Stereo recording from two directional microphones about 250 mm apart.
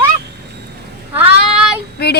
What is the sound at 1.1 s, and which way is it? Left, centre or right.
Child singing, centre.